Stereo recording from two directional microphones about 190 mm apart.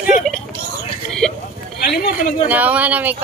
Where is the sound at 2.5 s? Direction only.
10° right (ahead or behind).